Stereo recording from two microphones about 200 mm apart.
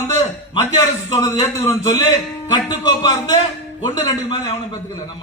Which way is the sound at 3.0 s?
20° left (ahead or behind).